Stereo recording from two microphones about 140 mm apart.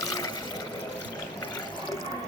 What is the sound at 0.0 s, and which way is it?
Water, 25° left (ahead or behind).